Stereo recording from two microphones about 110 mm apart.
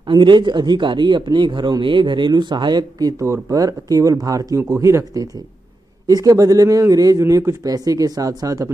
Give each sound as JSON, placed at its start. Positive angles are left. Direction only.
{"t": 0.0, "sound": "a man's voice", "side_deg": -45}